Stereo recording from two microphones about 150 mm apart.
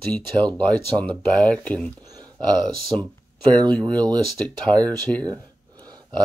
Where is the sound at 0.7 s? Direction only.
10° left (ahead or behind).